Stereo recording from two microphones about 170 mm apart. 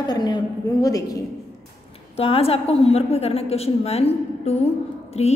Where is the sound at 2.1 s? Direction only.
35° left (ahead or behind).